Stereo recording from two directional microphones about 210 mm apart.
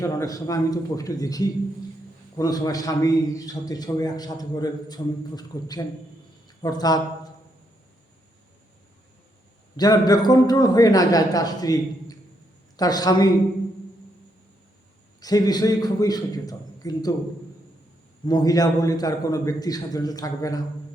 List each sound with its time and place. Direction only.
0.0 s a man's voice: 15° left (ahead or behind)
9.7 s a man's voice: 20° left (ahead or behind)
15.2 s a man's voice: 20° left (ahead or behind)
18.3 s a man's voice: 20° left (ahead or behind)